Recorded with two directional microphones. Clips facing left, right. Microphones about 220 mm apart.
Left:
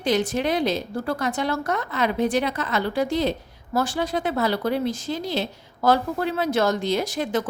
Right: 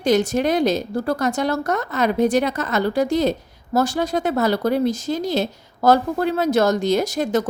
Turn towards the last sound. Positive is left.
turn(degrees=-45)  # may be behind; listen again after turning